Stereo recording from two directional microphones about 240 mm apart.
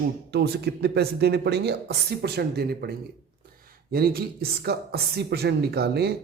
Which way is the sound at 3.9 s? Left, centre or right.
Right.